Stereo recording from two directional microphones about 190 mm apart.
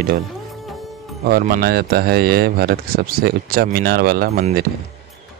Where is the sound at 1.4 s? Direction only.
50° right (ahead or behind).